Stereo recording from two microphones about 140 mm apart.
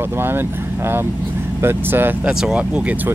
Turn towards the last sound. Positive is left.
turn(degrees=-10)  # may be behind; listen again after turning